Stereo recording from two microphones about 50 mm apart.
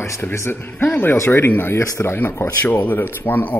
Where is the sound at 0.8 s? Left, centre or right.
Left.